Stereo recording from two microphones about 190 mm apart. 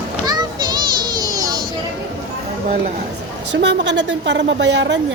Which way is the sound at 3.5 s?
70° right (ahead or behind).